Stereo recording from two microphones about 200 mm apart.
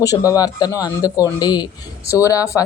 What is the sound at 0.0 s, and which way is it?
Speech, 15° left (ahead or behind).